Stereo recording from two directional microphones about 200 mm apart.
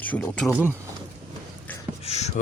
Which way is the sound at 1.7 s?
10° left (ahead or behind).